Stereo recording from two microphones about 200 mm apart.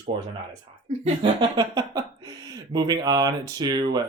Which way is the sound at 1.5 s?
20° right (ahead or behind).